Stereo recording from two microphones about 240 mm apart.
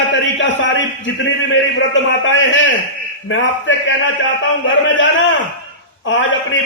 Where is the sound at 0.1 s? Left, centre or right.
Left.